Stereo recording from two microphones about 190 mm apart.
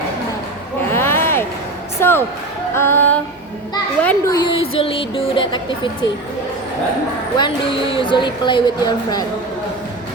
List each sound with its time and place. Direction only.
0.9 s a sound: 10° left (ahead or behind)
2.0 s speech: 10° left (ahead or behind)
2.7 s female singing: 10° left (ahead or behind)
4.0 s speech: 20° left (ahead or behind)
4.6 s speech: 30° left (ahead or behind)
7.3 s speech: 25° left (ahead or behind)